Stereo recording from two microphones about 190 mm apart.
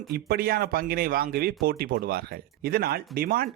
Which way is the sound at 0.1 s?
55° right (ahead or behind).